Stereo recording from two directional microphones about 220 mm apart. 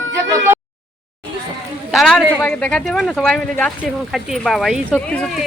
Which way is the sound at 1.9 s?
Centre (ahead or behind).